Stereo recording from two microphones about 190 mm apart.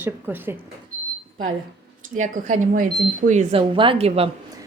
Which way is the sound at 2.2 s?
40° right (ahead or behind).